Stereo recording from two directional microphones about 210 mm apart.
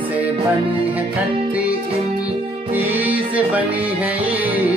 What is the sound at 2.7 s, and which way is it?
Music, 10° right (ahead or behind).